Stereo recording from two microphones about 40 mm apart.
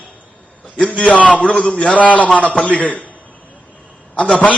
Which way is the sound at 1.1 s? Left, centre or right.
Left.